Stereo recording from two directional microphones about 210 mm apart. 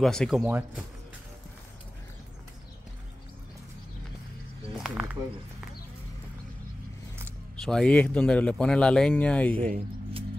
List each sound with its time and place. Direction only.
0.0 s speech: centre (ahead or behind)
4.8 s a sound: 5° right (ahead or behind)
7.6 s speech: 5° left (ahead or behind)